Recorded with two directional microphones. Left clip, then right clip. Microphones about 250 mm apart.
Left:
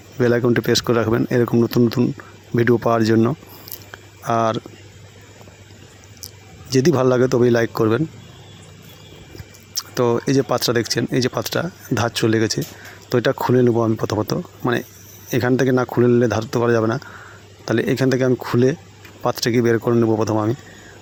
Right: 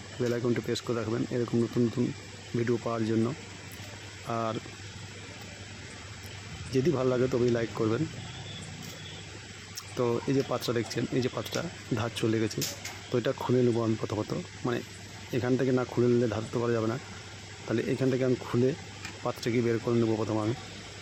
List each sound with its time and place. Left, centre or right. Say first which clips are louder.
0.2 s speech: left 13 dB; left
6.7 s speech: left 11 dB; left
9.7 s speech: left 11 dB; left